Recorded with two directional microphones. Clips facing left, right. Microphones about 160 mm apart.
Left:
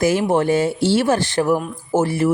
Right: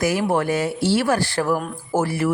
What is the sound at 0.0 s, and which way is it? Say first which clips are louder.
A woman's voice: left 3 dB; 25° left (ahead or behind).